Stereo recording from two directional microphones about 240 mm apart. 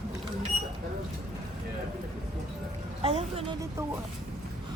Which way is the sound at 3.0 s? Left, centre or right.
Right.